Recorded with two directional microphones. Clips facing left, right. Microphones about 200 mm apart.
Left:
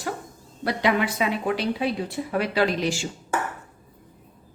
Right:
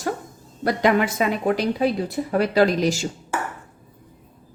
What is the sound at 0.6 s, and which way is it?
A woman's voice, 45° right (ahead or behind).